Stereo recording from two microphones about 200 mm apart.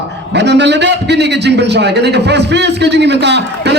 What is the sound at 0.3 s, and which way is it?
A man's voice, 60° right (ahead or behind).